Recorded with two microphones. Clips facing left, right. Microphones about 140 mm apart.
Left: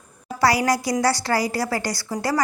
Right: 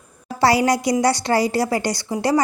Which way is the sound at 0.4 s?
25° right (ahead or behind).